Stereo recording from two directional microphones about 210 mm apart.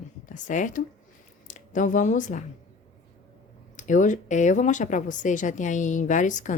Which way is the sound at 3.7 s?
35° left (ahead or behind).